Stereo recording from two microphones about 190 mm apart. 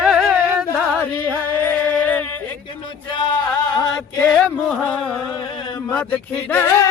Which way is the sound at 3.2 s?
25° left (ahead or behind).